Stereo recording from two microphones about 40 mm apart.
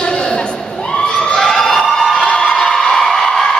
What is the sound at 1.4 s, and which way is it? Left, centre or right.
Emergency vehicle, centre.